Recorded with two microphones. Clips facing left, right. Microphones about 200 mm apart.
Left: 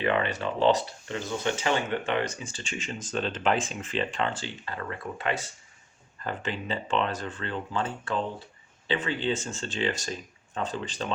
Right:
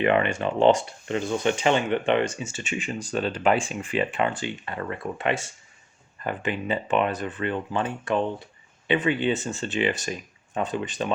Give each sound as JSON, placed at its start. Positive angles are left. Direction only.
{"t": 0.0, "sound": "speech", "side_deg": -20}
{"t": 2.6, "sound": "speech", "side_deg": -5}
{"t": 4.6, "sound": "speech", "side_deg": -25}
{"t": 6.2, "sound": "speech", "side_deg": -15}